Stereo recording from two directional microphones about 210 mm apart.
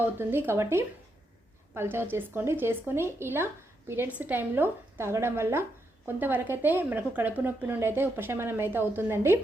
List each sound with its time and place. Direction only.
0.0 s speech: 10° right (ahead or behind)